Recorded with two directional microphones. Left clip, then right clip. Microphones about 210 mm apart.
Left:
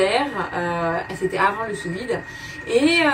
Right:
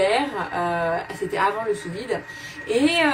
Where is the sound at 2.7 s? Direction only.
10° right (ahead or behind).